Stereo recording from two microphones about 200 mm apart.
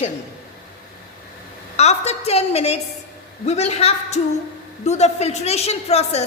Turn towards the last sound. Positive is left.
turn(degrees=30)  # may be behind; listen again after turning